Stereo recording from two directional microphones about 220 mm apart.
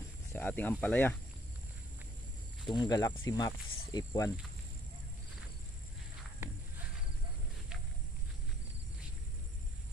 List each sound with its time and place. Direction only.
0.3 s speech: 5° left (ahead or behind)
2.7 s cricket: 15° left (ahead or behind)